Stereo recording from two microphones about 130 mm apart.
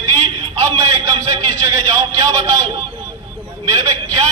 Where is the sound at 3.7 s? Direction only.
30° right (ahead or behind).